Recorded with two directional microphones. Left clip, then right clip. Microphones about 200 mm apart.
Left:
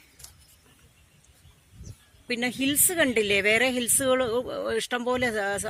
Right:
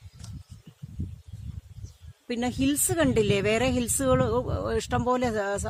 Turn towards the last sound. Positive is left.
turn(degrees=-40)  # may be behind; listen again after turning